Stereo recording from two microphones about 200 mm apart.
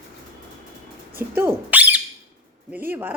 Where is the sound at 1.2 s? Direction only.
10° right (ahead or behind).